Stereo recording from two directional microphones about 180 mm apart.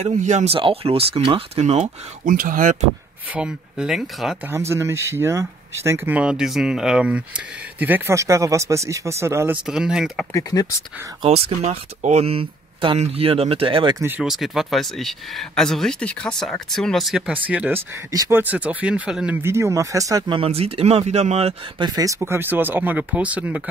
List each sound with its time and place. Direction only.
0.0 s speech: 40° right (ahead or behind)
3.3 s speech: 5° right (ahead or behind)
4.5 s speech: 15° right (ahead or behind)
10.3 s speech: 20° left (ahead or behind)
11.2 s speech: 35° right (ahead or behind)
13.9 s speech: 10° right (ahead or behind)